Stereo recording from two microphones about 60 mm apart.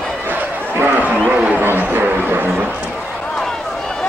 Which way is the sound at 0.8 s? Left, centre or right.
Right.